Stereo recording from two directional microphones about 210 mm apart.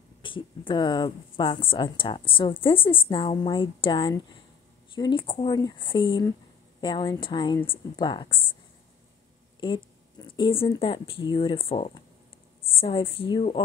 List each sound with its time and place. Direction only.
0.2 s speech: 25° left (ahead or behind)
9.6 s a woman's voice: 20° left (ahead or behind)